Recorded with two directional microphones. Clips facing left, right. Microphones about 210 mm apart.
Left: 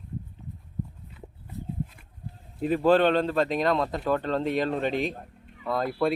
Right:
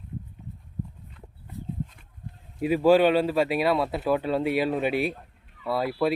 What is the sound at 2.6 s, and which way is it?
Speech, 10° right (ahead or behind).